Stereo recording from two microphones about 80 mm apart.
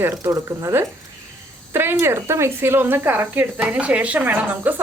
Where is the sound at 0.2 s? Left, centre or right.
Right.